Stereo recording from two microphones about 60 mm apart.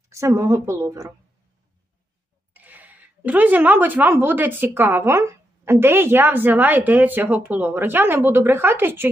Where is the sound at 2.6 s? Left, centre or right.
Right.